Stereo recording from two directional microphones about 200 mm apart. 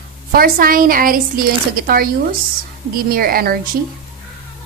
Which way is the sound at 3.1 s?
50° right (ahead or behind).